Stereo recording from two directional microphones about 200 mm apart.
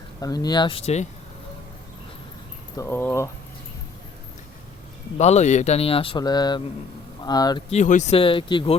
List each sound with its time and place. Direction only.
0.2 s speech: 20° left (ahead or behind)
2.7 s speech: 10° left (ahead or behind)
5.1 s speech: 35° left (ahead or behind)
7.7 s speech: 35° left (ahead or behind)